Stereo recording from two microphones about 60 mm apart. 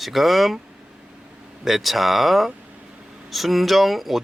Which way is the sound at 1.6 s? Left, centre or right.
Centre.